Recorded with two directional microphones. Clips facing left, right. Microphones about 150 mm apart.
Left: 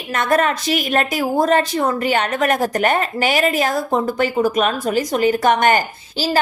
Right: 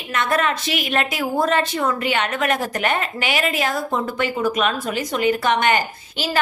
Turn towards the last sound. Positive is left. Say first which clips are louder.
# left 3 dB
turn(degrees=45)  # may be behind; listen again after turning